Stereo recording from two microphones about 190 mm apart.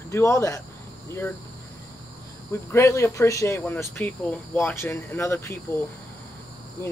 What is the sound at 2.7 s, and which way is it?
Speech, 15° left (ahead or behind).